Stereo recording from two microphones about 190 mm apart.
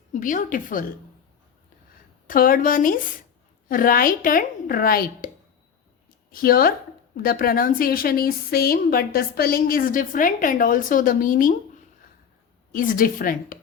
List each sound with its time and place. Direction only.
0.1 s a woman's voice: 45° left (ahead or behind)
2.2 s a woman's voice: 45° left (ahead or behind)
6.3 s a woman's voice: 50° left (ahead or behind)
12.7 s a woman's voice: 45° left (ahead or behind)